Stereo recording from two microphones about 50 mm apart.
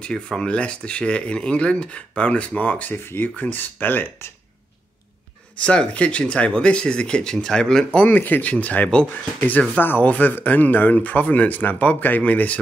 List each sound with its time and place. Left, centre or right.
0.0 s speech: centre
2.9 s speech: left
3.3 s speech: left
5.6 s speech: left
8.1 s speech: left